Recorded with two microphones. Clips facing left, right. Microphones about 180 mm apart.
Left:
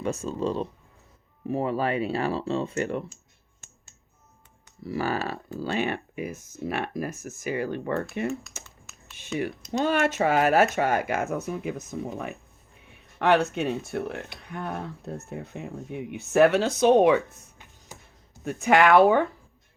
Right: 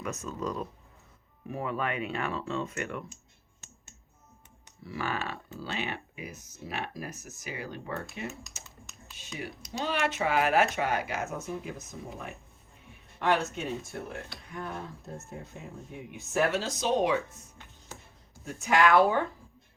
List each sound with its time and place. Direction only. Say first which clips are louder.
0.0 s speech: left 7 dB; 30° left (ahead or behind)
3.6 s music: right 1 dB; 50° left (ahead or behind)
4.8 s speech: left 6 dB; 40° left (ahead or behind); by 8.3 s 55° left (ahead or behind)
9.8 s speech: left 6 dB; 45° left (ahead or behind); by 11.7 s 65° left (ahead or behind)
13.1 s speech: left 6 dB; 70° left (ahead or behind)
18.4 s speech: left 5 dB; 65° left (ahead or behind)